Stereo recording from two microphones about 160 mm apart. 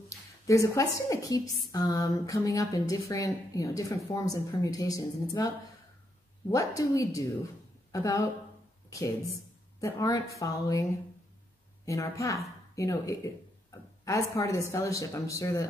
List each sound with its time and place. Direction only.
0.5 s a woman's voice: 20° left (ahead or behind)
6.5 s a woman's voice: 20° left (ahead or behind)